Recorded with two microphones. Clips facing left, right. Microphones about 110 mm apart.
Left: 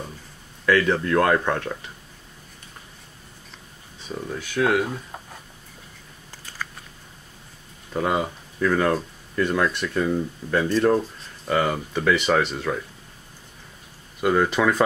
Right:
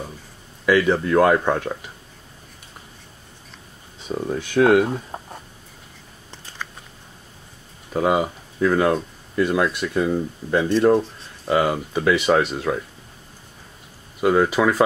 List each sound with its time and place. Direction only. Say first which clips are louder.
0.7 s speech: right 2 dB; 5° right (ahead or behind)
4.3 s speech: right 6 dB; 20° right (ahead or behind)
7.9 s speech: right 4 dB; 10° right (ahead or behind)
14.2 s speech: right 2 dB; 10° right (ahead or behind)